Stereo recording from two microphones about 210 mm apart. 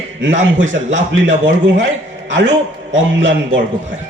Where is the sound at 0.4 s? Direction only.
65° right (ahead or behind).